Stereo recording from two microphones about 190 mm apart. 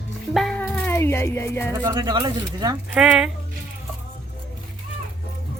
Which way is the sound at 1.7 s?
20° right (ahead or behind).